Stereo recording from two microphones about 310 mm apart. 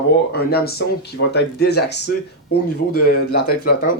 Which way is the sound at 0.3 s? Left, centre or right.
Left.